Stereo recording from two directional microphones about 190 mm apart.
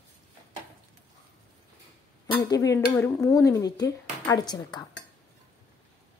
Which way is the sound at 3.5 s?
20° left (ahead or behind).